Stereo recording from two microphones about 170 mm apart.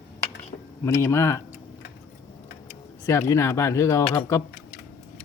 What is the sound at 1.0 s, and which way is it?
Speech, 15° left (ahead or behind).